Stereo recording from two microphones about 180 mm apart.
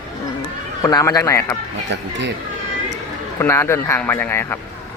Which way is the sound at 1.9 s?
80° right.